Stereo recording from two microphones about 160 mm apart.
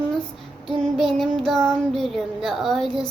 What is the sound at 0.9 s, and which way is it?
Child singing, centre (ahead or behind).